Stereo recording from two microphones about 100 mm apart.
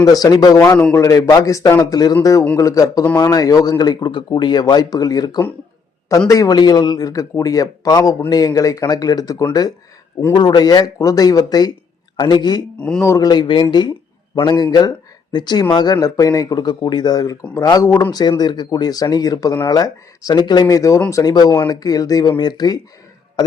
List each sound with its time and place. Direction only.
0.0 s a man's voice: 40° left (ahead or behind)
13.0 s speech: 30° left (ahead or behind)
13.2 s a man's voice: 50° left (ahead or behind)